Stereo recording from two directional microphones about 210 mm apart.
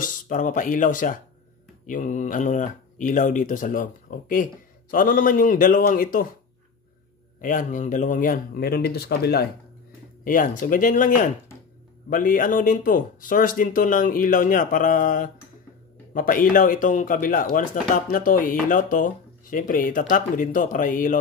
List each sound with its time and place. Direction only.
0.0 s speech: 40° left (ahead or behind)
7.3 s speech: 40° left (ahead or behind)